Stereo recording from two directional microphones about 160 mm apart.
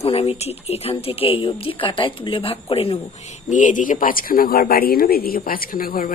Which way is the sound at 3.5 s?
55° left (ahead or behind).